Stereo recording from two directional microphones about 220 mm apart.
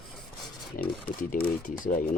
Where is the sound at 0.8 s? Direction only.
40° left (ahead or behind).